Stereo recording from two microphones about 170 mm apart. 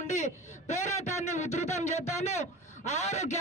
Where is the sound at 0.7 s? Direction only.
40° left (ahead or behind).